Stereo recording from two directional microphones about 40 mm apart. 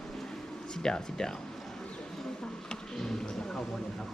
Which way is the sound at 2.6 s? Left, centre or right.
Centre.